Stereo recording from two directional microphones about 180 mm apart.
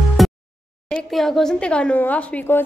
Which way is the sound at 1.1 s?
Centre (ahead or behind).